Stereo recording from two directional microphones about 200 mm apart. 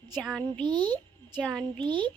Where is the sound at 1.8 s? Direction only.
25° right (ahead or behind).